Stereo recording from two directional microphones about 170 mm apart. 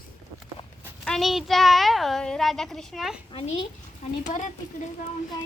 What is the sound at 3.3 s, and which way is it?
Speech, 35° left (ahead or behind).